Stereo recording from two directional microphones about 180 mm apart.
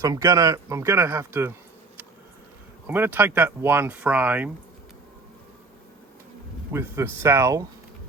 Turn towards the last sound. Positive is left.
turn(degrees=-15)  # may be behind; listen again after turning